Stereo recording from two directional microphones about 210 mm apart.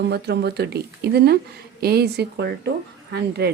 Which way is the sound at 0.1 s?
50° right (ahead or behind).